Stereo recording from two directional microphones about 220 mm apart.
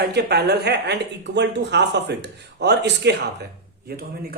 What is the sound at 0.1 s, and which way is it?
A man's voice, 50° right (ahead or behind).